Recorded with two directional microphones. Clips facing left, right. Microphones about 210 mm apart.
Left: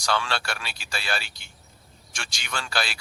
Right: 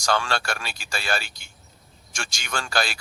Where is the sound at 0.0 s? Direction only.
45° right (ahead or behind).